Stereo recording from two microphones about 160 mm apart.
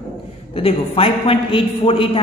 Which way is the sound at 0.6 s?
35° left (ahead or behind).